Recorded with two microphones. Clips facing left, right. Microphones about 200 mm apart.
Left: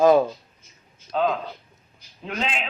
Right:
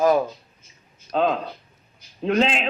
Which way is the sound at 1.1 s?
40° right (ahead or behind).